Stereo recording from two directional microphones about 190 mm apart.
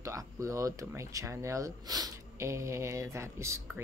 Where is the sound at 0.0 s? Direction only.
15° right (ahead or behind).